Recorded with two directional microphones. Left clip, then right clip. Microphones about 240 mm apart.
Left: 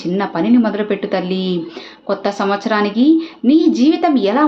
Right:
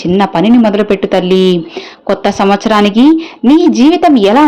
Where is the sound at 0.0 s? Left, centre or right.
Right.